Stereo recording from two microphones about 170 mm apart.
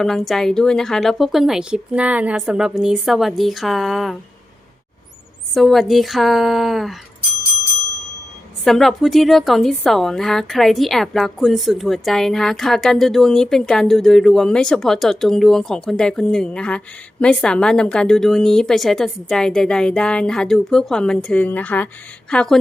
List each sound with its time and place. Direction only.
0.0 s a woman's voice: centre (ahead or behind)
5.5 s a woman's voice: centre (ahead or behind)
8.6 s a woman's voice: centre (ahead or behind)